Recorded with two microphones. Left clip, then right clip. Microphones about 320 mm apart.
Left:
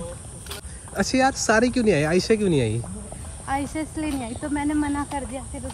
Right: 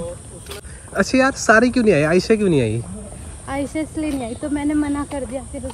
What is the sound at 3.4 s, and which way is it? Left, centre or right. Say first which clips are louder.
Speech: right 3 dB; left.